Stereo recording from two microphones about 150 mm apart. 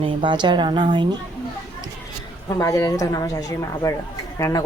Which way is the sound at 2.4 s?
20° left (ahead or behind).